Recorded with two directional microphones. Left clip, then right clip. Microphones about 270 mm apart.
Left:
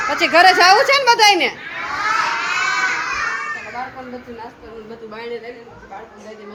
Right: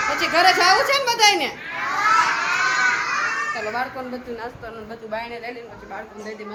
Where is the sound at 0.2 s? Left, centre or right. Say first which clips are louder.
Left 6 dB; centre.